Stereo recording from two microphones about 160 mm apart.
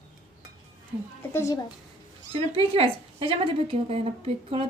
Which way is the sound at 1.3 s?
20° left (ahead or behind).